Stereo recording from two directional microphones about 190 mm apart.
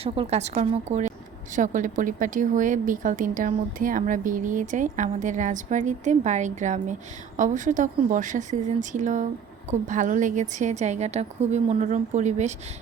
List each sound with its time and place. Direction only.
0.0 s a woman's voice: 35° right (ahead or behind)